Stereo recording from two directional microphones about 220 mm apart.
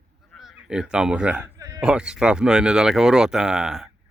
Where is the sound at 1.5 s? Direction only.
15° right (ahead or behind).